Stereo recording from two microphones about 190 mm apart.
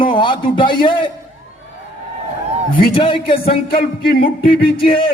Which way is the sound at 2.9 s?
25° left (ahead or behind).